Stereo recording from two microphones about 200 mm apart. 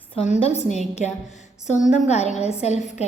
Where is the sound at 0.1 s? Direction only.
30° left (ahead or behind).